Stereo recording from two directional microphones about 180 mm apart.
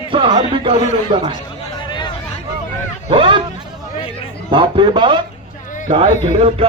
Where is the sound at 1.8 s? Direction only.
25° left (ahead or behind).